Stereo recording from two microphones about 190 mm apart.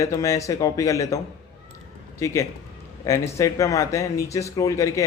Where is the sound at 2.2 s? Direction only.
15° left (ahead or behind).